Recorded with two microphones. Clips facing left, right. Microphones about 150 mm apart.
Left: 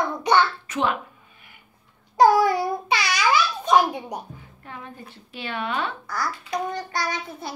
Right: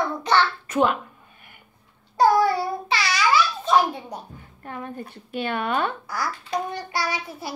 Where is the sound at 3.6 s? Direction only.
15° left (ahead or behind).